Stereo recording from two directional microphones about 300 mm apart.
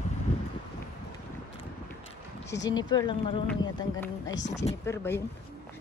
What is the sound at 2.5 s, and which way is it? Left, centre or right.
Speech, centre.